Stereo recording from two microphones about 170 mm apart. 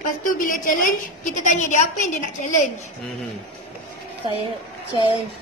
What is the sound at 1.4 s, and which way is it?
A woman's voice, 45° left (ahead or behind).